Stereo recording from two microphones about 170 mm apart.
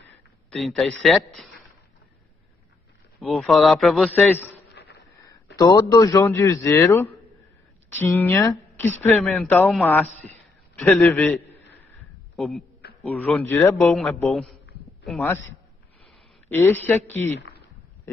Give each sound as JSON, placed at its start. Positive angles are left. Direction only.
{"t": 0.5, "sound": "a man's voice", "side_deg": 0}
{"t": 3.2, "sound": "a man's voice", "side_deg": 0}
{"t": 4.7, "sound": "a sound", "side_deg": 75}
{"t": 5.6, "sound": "a woman's voice", "side_deg": 20}
{"t": 11.9, "sound": "a sound", "side_deg": 0}
{"t": 13.0, "sound": "a woman's voice", "side_deg": 10}
{"t": 13.9, "sound": "a man's voice", "side_deg": 0}
{"t": 16.4, "sound": "a woman's voice", "side_deg": 10}